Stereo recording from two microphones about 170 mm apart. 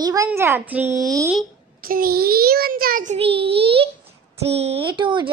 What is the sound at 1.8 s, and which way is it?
A child's voice, 60° right (ahead or behind).